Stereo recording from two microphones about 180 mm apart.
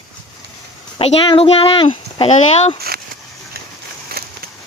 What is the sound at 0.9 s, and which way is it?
Speech, 30° left (ahead or behind).